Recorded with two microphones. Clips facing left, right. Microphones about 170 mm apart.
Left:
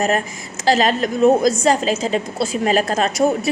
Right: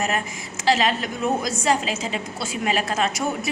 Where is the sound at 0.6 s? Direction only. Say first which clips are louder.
Left 5 dB; 40° left (ahead or behind).